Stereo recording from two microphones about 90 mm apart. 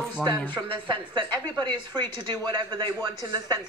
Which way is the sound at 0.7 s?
60° right (ahead or behind).